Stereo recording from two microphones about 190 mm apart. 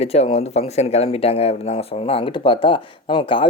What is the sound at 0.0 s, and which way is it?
Speech, 30° left (ahead or behind).